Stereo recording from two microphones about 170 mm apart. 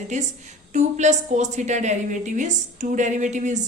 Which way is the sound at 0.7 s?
45° right (ahead or behind).